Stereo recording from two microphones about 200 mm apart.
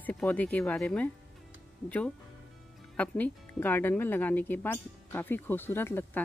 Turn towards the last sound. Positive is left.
turn(degrees=10)  # may be behind; listen again after turning